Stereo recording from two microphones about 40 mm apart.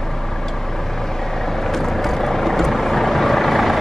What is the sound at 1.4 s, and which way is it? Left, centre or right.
Vehicle, centre.